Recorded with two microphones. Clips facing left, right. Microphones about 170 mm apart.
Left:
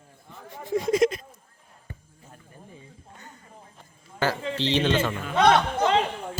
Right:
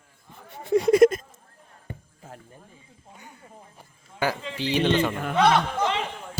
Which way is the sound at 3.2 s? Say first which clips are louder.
Right 3 dB; 10° right (ahead or behind).